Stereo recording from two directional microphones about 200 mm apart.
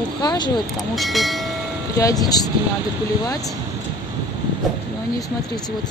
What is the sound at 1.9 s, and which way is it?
Speech, 15° left (ahead or behind).